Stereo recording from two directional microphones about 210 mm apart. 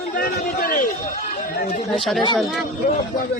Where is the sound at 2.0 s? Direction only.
Centre (ahead or behind).